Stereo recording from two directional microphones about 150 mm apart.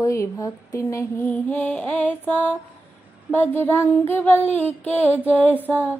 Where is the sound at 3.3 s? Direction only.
15° left (ahead or behind).